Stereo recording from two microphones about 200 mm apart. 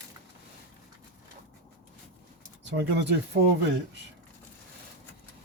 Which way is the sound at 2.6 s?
60° right (ahead or behind).